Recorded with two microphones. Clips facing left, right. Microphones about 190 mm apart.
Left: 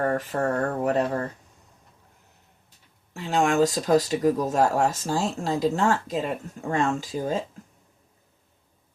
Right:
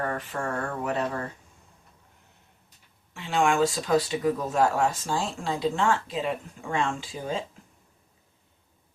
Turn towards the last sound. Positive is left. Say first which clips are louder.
# left 5 dB
turn(degrees=45)  # may be behind; listen again after turning